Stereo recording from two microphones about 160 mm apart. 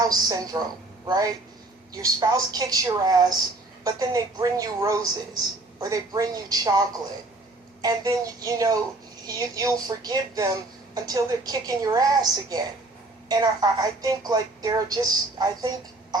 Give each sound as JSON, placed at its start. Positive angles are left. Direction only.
{"t": 0.0, "sound": "speech", "side_deg": -25}